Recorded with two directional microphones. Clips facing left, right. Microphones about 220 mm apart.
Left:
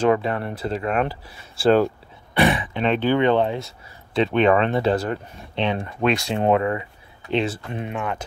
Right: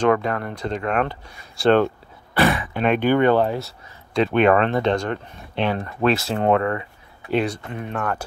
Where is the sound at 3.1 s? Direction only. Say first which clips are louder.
Right 1 dB; 50° right (ahead or behind).